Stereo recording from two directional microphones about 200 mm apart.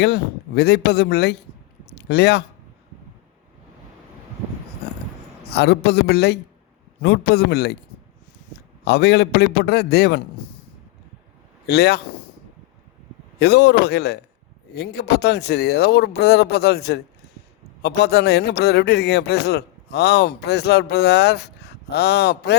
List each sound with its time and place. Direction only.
0.0 s a man's voice: 55° left (ahead or behind)
1.9 s a sound: 55° left (ahead or behind)
5.5 s a man's voice: 55° left (ahead or behind)
11.6 s a man's voice: 55° left (ahead or behind)
13.4 s a man's voice: 55° left (ahead or behind)